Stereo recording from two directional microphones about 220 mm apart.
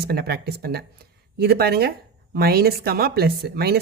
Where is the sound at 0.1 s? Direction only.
45° right (ahead or behind).